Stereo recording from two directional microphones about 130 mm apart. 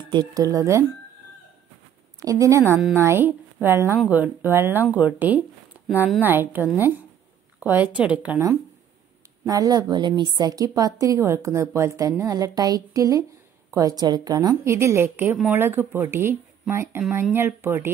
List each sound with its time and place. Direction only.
0.1 s a woman's voice: 30° right (ahead or behind)
2.1 s a woman's voice: 25° right (ahead or behind)
9.4 s a woman's voice: 25° right (ahead or behind)